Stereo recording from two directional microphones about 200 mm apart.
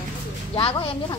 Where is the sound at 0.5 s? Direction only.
25° left (ahead or behind).